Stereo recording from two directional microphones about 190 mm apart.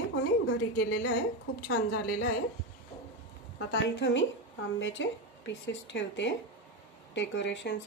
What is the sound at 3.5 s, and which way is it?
Speech, 75° left (ahead or behind).